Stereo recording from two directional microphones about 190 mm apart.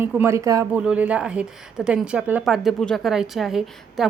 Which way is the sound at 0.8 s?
5° right (ahead or behind).